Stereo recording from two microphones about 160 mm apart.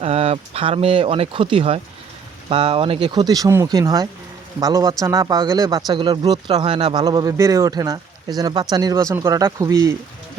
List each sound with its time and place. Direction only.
0.0 s speech: 40° right (ahead or behind); by 9.9 s 20° right (ahead or behind)